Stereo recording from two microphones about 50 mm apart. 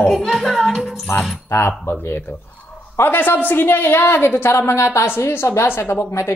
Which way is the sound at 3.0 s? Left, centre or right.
Left.